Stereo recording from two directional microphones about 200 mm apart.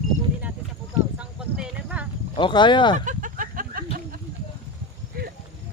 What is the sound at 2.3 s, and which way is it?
Speech, 25° left (ahead or behind).